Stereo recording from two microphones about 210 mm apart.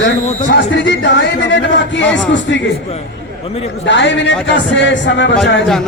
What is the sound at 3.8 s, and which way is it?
A man's voice, 60° left (ahead or behind).